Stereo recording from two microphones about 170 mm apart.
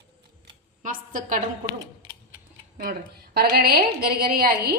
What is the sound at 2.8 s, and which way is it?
A woman's voice, 60° right (ahead or behind).